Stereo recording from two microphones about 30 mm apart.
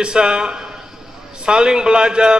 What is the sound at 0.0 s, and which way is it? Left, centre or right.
A man's voice, right.